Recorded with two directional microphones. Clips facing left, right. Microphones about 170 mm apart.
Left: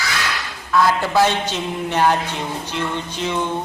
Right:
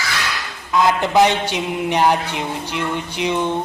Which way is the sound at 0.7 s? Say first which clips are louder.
Right 1 dB; 20° right (ahead or behind).